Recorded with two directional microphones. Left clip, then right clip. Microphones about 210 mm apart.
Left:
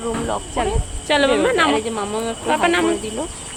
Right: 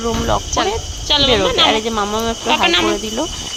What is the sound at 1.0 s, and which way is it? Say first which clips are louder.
Speech: right 2 dB; 30° left (ahead or behind).